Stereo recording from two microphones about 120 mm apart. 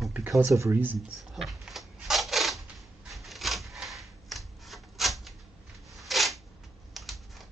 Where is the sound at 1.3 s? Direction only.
Centre (ahead or behind).